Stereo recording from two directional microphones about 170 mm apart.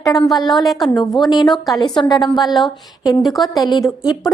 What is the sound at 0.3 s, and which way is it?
Speech, centre (ahead or behind).